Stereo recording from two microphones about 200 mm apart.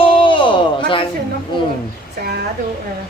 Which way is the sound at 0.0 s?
25° left (ahead or behind).